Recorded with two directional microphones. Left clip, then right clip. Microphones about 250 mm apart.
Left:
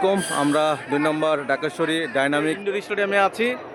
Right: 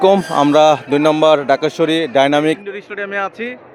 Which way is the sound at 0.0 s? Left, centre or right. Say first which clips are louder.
Right 9 dB; right.